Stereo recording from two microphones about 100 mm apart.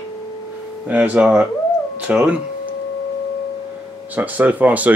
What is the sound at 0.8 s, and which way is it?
Speech, 15° right (ahead or behind).